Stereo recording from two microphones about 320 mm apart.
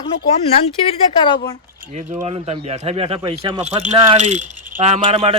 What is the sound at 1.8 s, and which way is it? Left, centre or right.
Speech, right.